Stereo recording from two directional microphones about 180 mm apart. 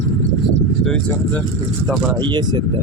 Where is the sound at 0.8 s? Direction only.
5° left (ahead or behind).